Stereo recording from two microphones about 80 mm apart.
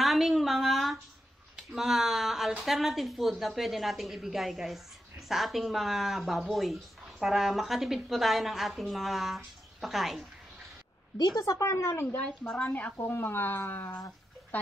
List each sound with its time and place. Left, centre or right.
0.0 s a sound: centre
1.6 s speech: centre
11.1 s a woman's voice: left
12.2 s a woman's voice: centre